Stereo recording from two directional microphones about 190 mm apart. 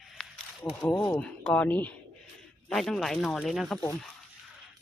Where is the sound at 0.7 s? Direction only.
15° left (ahead or behind).